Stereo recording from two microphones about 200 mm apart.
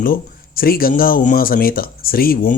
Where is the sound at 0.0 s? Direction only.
45° left (ahead or behind).